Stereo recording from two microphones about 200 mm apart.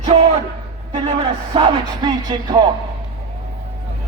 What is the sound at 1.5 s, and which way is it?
A man's voice, 20° right (ahead or behind).